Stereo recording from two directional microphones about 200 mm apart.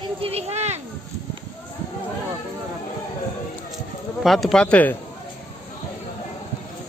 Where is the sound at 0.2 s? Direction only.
30° right (ahead or behind).